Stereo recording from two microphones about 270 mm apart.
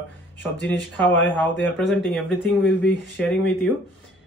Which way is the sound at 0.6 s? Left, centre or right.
Left.